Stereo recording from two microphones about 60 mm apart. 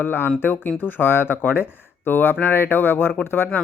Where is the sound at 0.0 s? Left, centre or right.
Left.